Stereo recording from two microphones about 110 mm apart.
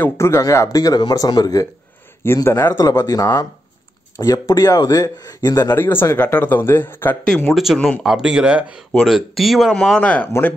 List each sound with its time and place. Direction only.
0.0 s speech: 25° left (ahead or behind)
2.2 s speech: 25° left (ahead or behind)
2.8 s speech: 35° left (ahead or behind); by 7.2 s 20° left (ahead or behind)
7.4 s speech: centre (ahead or behind)
9.9 s speech: 10° left (ahead or behind)